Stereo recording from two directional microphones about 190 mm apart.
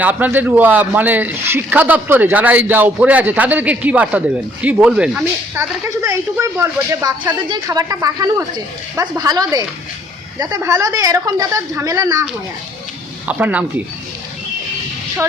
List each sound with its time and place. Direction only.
0.0 s speech: 10° right (ahead or behind)
5.9 s speech: 15° right (ahead or behind)
13.2 s speech: 10° right (ahead or behind)